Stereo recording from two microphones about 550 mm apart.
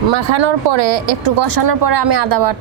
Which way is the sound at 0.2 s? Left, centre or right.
Right.